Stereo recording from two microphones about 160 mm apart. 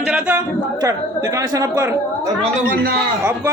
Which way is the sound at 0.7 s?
20° right (ahead or behind).